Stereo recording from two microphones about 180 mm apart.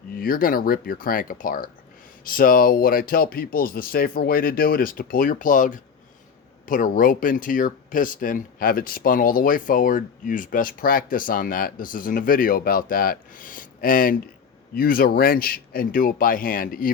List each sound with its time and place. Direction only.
0.2 s speech: 50° left (ahead or behind)